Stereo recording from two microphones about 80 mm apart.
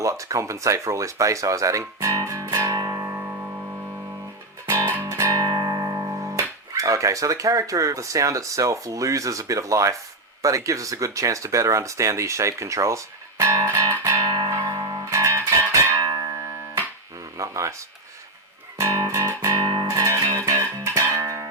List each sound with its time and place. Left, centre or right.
0.0 s speech: right
2.6 s music: right
5.0 s music: right
10.4 s speech: right
13.4 s music: right
14.2 s music: right
14.5 s music: right
14.8 s music: right
16.0 s music: right
17.3 s a sound: right
18.8 s music: right
19.2 s music: right
19.9 s music: right
20.9 s music: right